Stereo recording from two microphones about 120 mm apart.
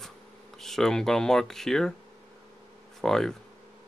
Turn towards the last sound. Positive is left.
turn(degrees=5)  # may be behind; listen again after turning